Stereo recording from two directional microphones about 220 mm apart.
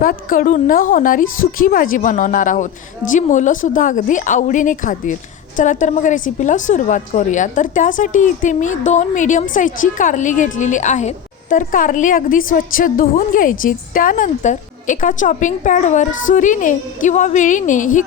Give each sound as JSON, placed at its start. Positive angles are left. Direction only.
{"t": 0.0, "sound": "a woman's voice", "side_deg": 40}